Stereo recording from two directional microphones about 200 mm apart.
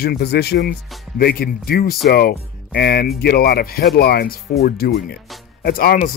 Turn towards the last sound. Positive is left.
turn(degrees=45)  # may be behind; listen again after turning